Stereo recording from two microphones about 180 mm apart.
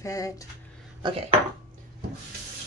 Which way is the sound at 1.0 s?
30° right (ahead or behind).